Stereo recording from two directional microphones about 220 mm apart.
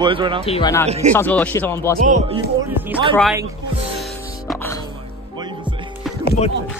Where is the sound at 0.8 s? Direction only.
30° right (ahead or behind).